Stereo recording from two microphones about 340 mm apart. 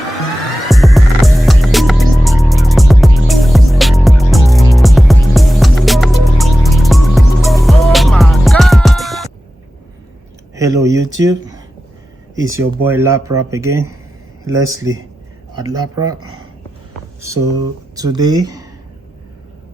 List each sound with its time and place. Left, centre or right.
0.7 s music: centre
10.5 s speech: centre
12.4 s speech: centre
16.1 s speech: right
17.9 s speech: centre